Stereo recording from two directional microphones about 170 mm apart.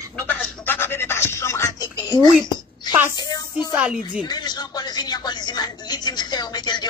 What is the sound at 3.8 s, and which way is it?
Speech, 5° right (ahead or behind).